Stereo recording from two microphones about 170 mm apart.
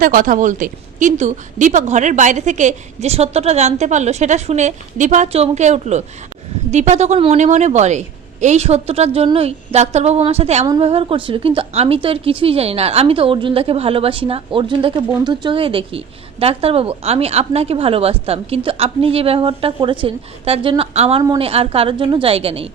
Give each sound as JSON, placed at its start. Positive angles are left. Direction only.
{"t": 0.0, "sound": "a woman's voice", "side_deg": -50}